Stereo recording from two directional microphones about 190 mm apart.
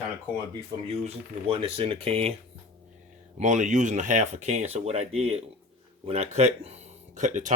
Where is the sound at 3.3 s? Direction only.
40° right (ahead or behind).